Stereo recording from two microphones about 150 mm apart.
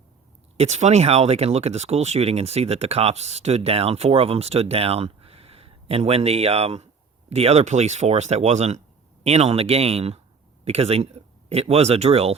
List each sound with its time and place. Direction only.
0.5 s speech: 45° right (ahead or behind)